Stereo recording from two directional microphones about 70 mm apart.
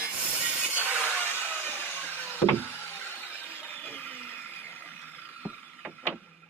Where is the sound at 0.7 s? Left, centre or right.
Right.